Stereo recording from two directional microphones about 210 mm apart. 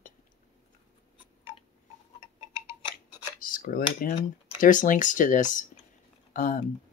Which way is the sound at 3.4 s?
40° left (ahead or behind).